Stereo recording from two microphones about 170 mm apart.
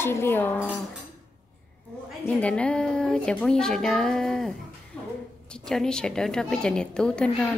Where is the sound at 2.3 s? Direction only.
5° left (ahead or behind).